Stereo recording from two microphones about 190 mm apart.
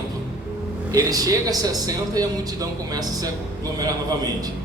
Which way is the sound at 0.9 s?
20° right (ahead or behind).